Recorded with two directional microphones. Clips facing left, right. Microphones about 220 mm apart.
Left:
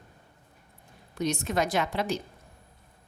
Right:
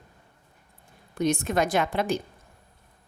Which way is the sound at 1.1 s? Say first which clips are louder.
Right 4 dB; 50° right (ahead or behind).